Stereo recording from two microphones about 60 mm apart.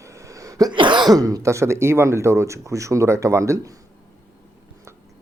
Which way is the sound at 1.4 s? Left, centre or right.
Right.